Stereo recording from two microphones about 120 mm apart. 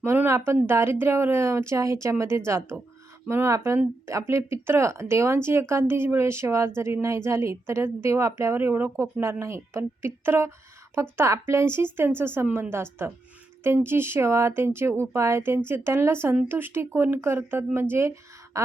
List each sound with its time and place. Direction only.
0.0 s speech: 20° right (ahead or behind)